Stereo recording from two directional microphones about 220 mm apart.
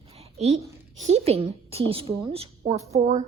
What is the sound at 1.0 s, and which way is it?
A woman's voice, 30° right (ahead or behind).